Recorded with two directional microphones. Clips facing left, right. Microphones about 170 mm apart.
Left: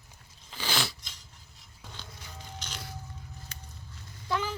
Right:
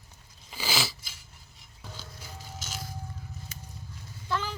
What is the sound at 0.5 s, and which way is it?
Chewing, 5° right (ahead or behind).